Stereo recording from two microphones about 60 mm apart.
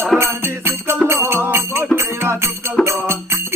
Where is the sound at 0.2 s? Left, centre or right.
Right.